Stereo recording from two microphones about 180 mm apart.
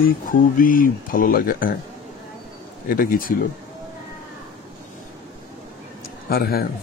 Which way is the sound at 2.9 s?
50° left (ahead or behind).